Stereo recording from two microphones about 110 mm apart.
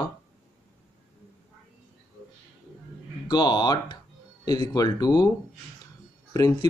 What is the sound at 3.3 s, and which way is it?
Speech, 40° left (ahead or behind).